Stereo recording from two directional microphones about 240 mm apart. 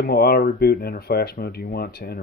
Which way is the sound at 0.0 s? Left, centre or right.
Left.